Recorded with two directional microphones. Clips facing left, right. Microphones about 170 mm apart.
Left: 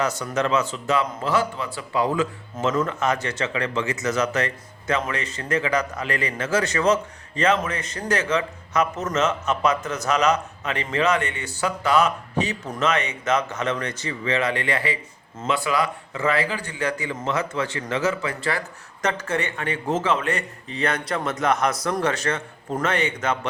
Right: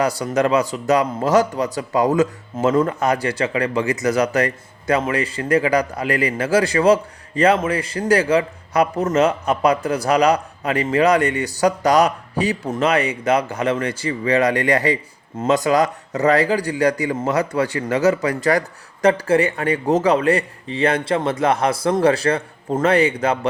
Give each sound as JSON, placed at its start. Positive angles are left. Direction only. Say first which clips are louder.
{"t": 0.0, "sound": "speech", "louder": "right 5 dB", "side_deg": -35}